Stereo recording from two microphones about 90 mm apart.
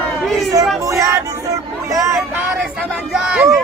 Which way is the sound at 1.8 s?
40° right (ahead or behind).